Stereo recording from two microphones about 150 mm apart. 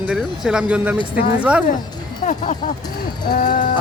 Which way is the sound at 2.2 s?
55° left (ahead or behind).